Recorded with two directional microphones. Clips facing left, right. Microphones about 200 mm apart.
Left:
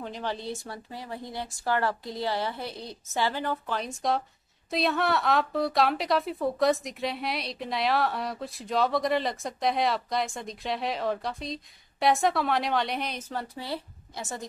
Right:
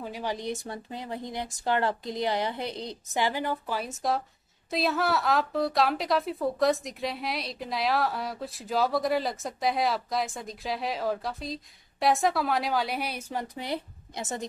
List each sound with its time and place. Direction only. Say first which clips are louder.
0.0 s a woman's voice: right 1 dB; 10° right (ahead or behind)